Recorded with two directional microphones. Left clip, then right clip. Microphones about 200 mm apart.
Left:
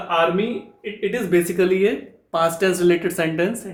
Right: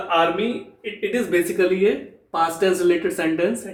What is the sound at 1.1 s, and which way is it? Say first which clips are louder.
Speech: left 1 dB; 40° left (ahead or behind).